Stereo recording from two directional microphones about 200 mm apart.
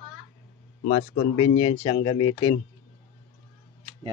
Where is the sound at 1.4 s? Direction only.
25° left (ahead or behind).